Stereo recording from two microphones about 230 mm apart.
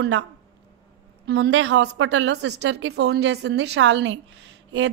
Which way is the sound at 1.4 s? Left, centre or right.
Right.